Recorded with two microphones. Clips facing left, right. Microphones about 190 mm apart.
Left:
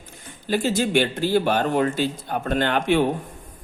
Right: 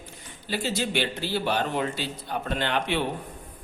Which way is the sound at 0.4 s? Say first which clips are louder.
Left 7 dB; 50° left (ahead or behind).